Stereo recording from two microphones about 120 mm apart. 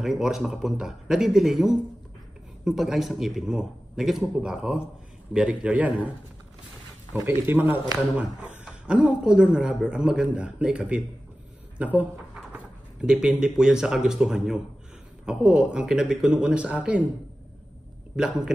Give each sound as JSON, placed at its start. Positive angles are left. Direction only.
{"t": 0.0, "sound": "a man's voice", "side_deg": -5}
{"t": 7.2, "sound": "speech", "side_deg": -15}
{"t": 18.1, "sound": "speech", "side_deg": -5}